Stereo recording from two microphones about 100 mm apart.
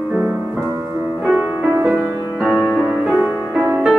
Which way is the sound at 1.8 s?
Centre (ahead or behind).